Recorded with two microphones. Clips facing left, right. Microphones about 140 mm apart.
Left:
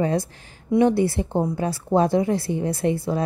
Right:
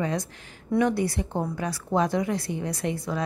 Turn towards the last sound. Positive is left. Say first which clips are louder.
# left 6 dB
turn(degrees=30)  # may be behind; listen again after turning